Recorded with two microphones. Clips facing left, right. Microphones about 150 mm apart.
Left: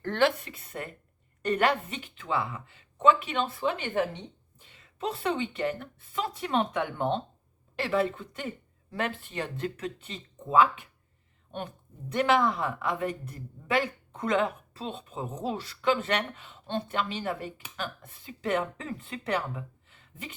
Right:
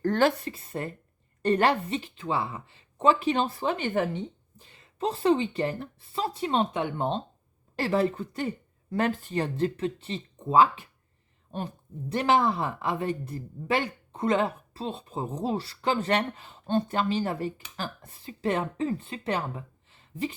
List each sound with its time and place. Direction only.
0.0 s a woman's voice: 40° right (ahead or behind)
7.8 s speech: 35° right (ahead or behind)
12.1 s speech: 30° right (ahead or behind)